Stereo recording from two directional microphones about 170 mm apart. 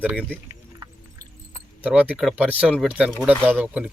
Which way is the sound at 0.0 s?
10° right (ahead or behind).